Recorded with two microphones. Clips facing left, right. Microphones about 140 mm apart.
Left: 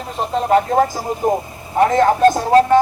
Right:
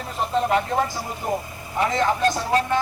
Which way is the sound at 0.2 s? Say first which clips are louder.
Left 5 dB; 35° left (ahead or behind).